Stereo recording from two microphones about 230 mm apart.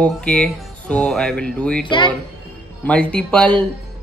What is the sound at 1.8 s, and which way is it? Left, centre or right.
Speech, centre.